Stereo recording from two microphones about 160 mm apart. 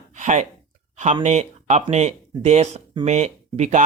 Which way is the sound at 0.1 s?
50° right (ahead or behind).